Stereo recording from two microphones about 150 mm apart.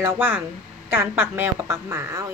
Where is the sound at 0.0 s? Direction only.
15° right (ahead or behind).